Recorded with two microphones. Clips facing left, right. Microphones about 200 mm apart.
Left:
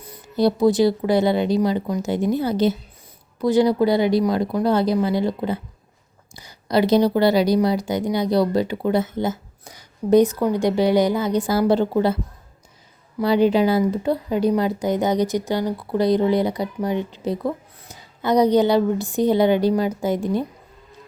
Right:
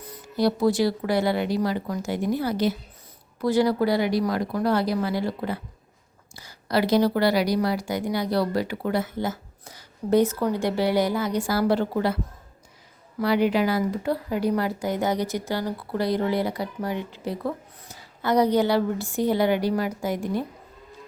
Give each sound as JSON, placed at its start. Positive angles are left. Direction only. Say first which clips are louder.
{"t": 0.3, "sound": "a woman's voice", "louder": "left 4 dB", "side_deg": 20}